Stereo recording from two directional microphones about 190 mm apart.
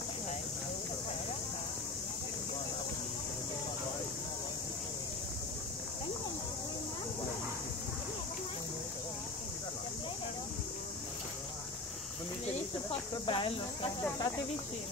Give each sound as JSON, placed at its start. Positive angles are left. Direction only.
{"t": 13.3, "sound": "speech", "side_deg": 25}